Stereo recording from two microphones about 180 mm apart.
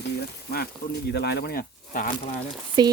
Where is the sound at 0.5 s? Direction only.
60° left (ahead or behind).